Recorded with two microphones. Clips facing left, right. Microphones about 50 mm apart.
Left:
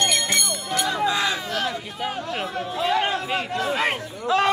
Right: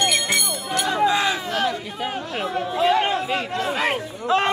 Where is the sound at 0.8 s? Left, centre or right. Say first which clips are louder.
Right 4 dB; right.